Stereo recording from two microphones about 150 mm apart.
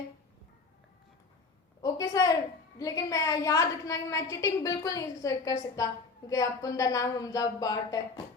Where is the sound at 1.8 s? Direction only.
25° left (ahead or behind).